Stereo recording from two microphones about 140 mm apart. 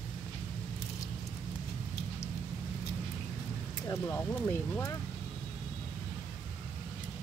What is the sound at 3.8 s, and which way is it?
Speech, 15° left (ahead or behind).